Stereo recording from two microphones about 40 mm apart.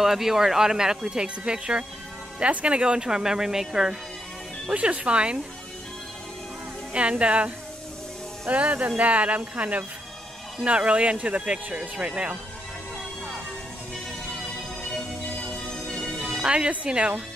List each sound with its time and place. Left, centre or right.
0.0 s speech: centre
4.7 s speech: right
6.9 s speech: right
16.4 s speech: right